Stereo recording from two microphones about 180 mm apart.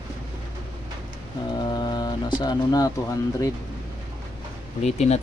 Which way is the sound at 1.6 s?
25° left (ahead or behind).